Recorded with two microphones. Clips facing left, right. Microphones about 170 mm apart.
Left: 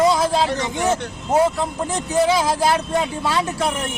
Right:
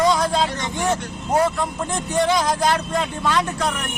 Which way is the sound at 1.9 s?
5° left (ahead or behind).